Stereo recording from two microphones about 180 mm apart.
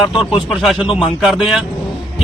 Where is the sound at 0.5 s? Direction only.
Centre (ahead or behind).